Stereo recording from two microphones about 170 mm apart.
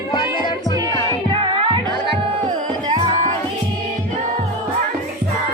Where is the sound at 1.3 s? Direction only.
30° right (ahead or behind).